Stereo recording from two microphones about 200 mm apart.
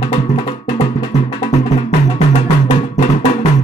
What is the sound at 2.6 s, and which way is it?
Music, 25° left (ahead or behind).